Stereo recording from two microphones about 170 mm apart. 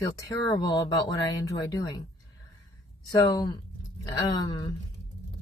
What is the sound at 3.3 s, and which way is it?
Speech, 25° left (ahead or behind).